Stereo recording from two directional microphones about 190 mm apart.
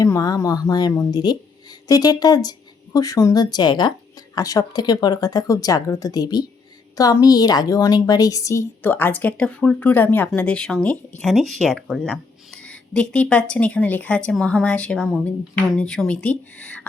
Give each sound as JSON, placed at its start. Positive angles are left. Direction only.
{"t": 0.0, "sound": "a woman's voice", "side_deg": 20}